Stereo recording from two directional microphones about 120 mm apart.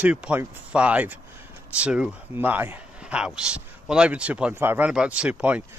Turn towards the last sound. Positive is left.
turn(degrees=-10)  # may be behind; listen again after turning